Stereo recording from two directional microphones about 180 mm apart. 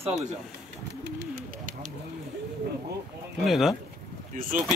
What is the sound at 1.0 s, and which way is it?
Bird, 70° right (ahead or behind).